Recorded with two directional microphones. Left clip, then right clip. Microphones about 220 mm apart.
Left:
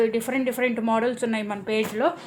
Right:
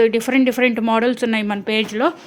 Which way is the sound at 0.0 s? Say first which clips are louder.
Right 8 dB; 45° right (ahead or behind).